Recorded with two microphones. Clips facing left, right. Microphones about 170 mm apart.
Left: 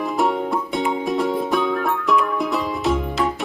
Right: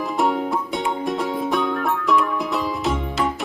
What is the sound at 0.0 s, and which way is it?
Music, centre (ahead or behind).